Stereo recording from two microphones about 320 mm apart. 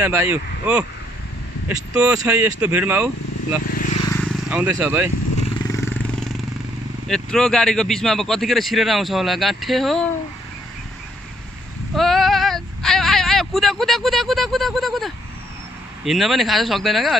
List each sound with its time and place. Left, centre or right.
0.0 s speech: centre
3.6 s vehicle: left
4.0 s vehicle: centre
5.7 s vehicle: centre
7.1 s speech: centre
11.9 s female singing: centre
16.0 s speech: centre